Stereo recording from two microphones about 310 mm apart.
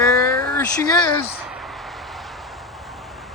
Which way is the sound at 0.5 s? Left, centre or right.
Centre.